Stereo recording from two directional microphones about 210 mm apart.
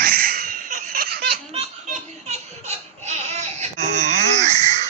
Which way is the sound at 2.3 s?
30° right (ahead or behind).